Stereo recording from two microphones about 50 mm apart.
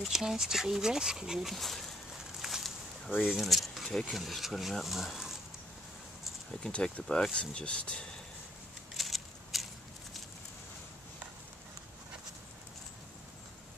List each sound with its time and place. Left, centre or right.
0.0 s speech: centre
1.5 s speech: centre
2.4 s a sound: centre
3.3 s speech: centre
6.7 s speech: centre
8.9 s a sound: centre